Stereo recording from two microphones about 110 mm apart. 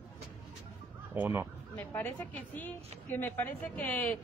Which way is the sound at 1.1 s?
20° right (ahead or behind).